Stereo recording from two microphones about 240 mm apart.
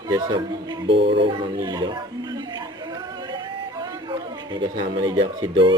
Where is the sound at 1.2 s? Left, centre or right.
Centre.